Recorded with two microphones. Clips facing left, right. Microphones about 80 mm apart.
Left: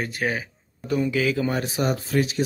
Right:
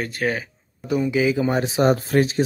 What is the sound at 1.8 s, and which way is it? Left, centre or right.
Speech, right.